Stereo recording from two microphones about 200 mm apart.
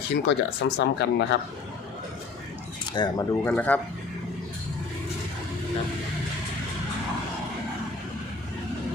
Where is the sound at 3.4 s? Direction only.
10° left (ahead or behind).